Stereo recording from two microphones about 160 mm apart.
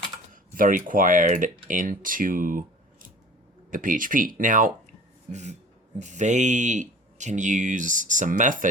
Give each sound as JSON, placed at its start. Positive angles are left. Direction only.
{"t": 0.5, "sound": "speech", "side_deg": -55}